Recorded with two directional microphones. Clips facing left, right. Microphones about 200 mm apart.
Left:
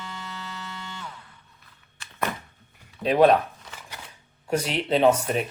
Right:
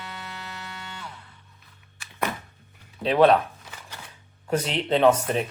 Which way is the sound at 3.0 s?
15° left (ahead or behind).